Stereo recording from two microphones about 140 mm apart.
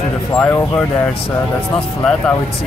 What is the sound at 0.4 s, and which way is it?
Speech, 15° left (ahead or behind).